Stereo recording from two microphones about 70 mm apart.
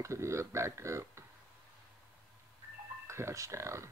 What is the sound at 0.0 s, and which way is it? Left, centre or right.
Speech, right.